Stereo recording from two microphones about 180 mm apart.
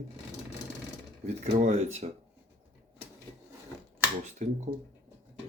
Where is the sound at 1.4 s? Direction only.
40° right (ahead or behind).